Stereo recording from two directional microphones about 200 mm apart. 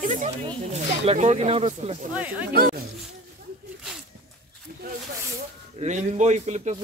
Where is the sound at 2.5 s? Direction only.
50° right (ahead or behind).